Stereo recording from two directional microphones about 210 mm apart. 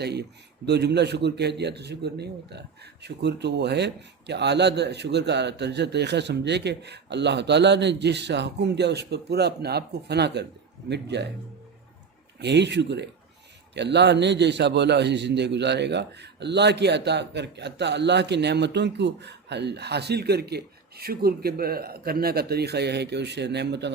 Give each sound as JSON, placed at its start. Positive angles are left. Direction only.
{"t": 0.0, "sound": "speech", "side_deg": -50}
{"t": 12.4, "sound": "speech", "side_deg": -55}